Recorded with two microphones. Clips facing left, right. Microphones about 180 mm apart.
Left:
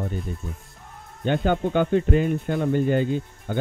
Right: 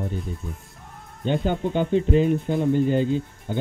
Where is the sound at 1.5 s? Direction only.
55° left (ahead or behind).